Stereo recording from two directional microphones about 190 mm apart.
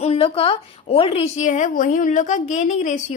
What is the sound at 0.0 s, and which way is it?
A woman's voice, 30° left (ahead or behind).